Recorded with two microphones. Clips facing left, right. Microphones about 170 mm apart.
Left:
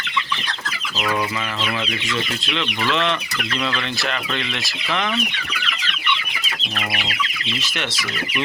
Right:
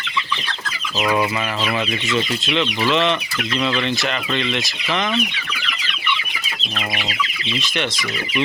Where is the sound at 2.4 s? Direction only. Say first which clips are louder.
Right 4 dB; centre (ahead or behind).